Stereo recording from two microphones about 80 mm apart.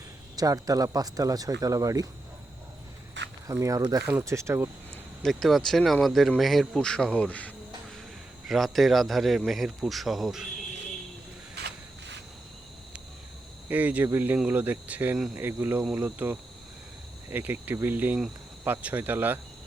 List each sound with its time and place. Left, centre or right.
0.3 s a man's voice: right
3.4 s speech: right
5.2 s speech: centre
8.4 s speech: centre
13.7 s speech: right